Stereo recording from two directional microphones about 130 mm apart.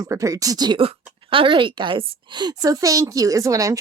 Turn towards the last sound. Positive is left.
turn(degrees=-25)  # may be behind; listen again after turning